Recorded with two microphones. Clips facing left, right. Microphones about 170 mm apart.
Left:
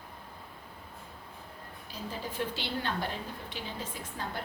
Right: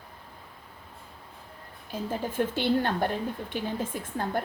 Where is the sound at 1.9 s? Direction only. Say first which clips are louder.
Right 8 dB; 50° right (ahead or behind).